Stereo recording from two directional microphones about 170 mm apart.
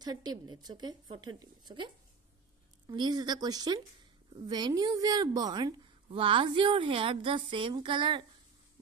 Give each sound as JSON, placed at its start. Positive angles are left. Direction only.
{"t": 0.0, "sound": "a woman's voice", "side_deg": -25}
{"t": 2.9, "sound": "a woman's voice", "side_deg": -25}